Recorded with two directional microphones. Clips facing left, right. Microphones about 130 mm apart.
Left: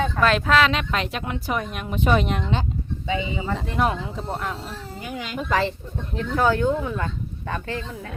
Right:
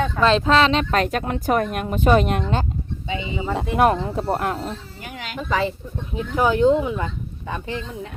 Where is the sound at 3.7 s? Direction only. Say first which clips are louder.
Right 7 dB; 50° right (ahead or behind).